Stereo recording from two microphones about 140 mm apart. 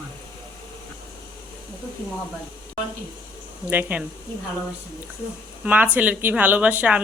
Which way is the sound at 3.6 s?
15° right (ahead or behind).